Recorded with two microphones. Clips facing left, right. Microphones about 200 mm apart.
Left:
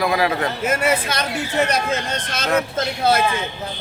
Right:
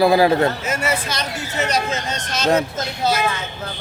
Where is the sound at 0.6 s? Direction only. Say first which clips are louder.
Left 3 dB; 55° left (ahead or behind).